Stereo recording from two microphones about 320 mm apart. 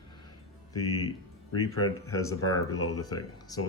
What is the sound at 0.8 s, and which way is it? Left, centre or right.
Speech, left.